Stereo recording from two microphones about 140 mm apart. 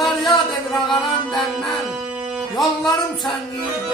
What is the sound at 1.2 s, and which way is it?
Music, centre (ahead or behind).